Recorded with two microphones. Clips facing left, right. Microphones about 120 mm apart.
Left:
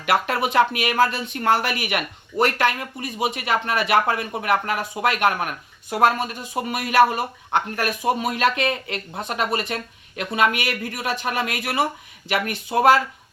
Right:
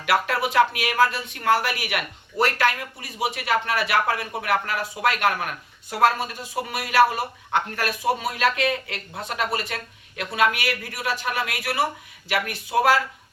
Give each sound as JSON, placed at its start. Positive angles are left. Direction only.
{"t": 0.1, "sound": "speech", "side_deg": 25}